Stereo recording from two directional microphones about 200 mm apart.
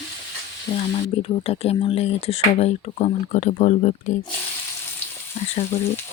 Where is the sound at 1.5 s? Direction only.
30° left (ahead or behind).